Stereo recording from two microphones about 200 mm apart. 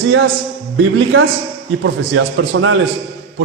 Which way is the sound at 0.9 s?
65° right (ahead or behind).